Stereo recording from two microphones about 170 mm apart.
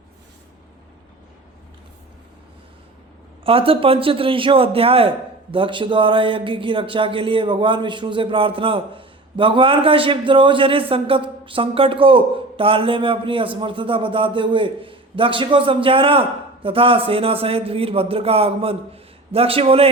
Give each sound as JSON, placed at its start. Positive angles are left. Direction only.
{"t": 3.4, "sound": "a man's voice", "side_deg": -35}